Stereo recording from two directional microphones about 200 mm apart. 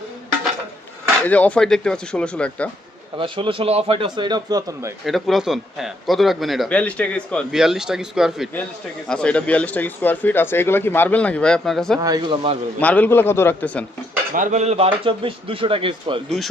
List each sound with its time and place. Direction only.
1.2 s a man's voice: 5° left (ahead or behind)
3.2 s a man's voice: 25° right (ahead or behind)
5.0 s a man's voice: centre (ahead or behind)
11.9 s a man's voice: 20° right (ahead or behind)
12.8 s speech: 10° left (ahead or behind)
14.3 s a man's voice: 40° right (ahead or behind)